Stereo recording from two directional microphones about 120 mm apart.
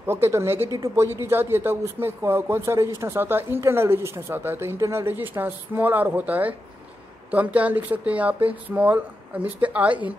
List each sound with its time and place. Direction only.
0.0 s speech: 20° right (ahead or behind)